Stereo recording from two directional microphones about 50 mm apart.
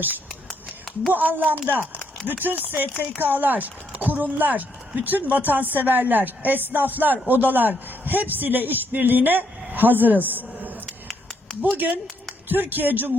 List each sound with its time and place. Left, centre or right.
1.1 s a woman's voice: right